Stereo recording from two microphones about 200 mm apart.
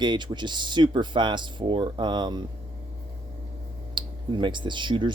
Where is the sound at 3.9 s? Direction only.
25° right (ahead or behind).